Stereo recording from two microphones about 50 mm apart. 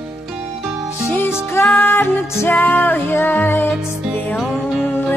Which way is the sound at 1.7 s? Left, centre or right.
Left.